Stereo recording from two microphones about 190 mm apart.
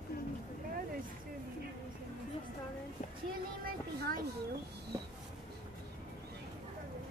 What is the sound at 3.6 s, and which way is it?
Speech, 50° right (ahead or behind).